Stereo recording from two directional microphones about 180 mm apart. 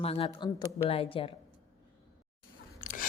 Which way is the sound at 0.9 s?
30° left (ahead or behind).